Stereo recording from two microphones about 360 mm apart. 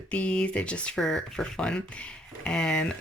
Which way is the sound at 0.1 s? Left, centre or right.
Centre.